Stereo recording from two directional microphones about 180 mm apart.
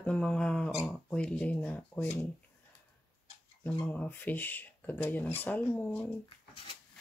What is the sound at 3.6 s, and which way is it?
Speech, 10° left (ahead or behind).